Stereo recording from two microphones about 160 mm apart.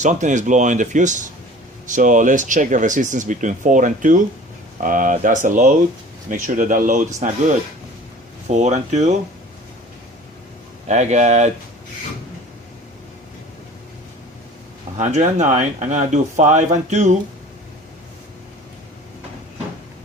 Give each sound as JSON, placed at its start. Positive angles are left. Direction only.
{"t": 0.0, "sound": "speech", "side_deg": -50}
{"t": 10.8, "sound": "speech", "side_deg": -45}
{"t": 14.9, "sound": "speech", "side_deg": -50}